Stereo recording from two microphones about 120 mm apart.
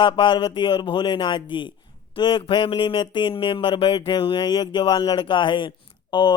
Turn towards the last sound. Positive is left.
turn(degrees=40)  # may be behind; listen again after turning